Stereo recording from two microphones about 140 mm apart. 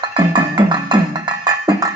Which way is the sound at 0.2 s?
30° right (ahead or behind).